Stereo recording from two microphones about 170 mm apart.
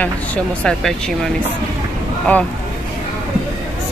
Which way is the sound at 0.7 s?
5° left (ahead or behind).